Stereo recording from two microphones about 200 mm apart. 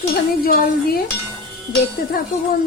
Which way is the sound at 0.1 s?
50° left (ahead or behind).